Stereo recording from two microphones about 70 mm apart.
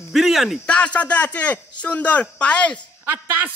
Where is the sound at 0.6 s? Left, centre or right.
Centre.